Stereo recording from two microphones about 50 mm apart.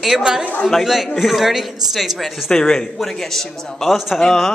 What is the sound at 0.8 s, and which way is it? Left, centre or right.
A man's voice, centre.